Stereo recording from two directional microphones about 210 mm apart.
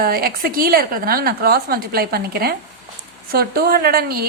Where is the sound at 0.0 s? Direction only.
45° right (ahead or behind).